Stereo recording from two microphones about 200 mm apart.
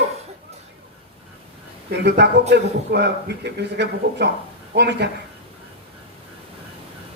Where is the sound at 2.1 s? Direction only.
55° right (ahead or behind).